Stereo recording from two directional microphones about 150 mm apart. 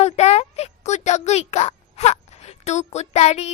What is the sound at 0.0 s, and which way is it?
Speech, 45° left (ahead or behind).